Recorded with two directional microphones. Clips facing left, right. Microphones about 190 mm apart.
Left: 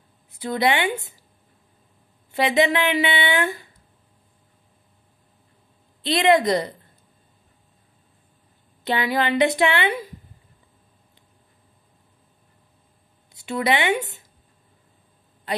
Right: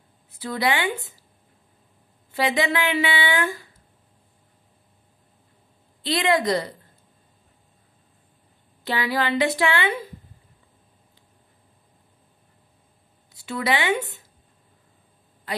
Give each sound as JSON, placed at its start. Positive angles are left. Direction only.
{"t": 0.3, "sound": "a woman's voice", "side_deg": 20}
{"t": 2.3, "sound": "a woman's voice", "side_deg": 20}
{"t": 6.0, "sound": "a woman's voice", "side_deg": 20}
{"t": 8.8, "sound": "a woman's voice", "side_deg": 20}
{"t": 13.3, "sound": "a woman's voice", "side_deg": 20}